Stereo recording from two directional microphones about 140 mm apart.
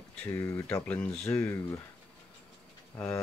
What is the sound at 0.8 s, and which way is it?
Speech, 10° left (ahead or behind).